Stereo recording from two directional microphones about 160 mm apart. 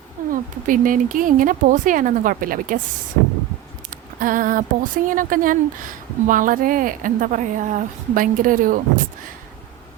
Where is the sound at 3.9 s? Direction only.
60° right (ahead or behind).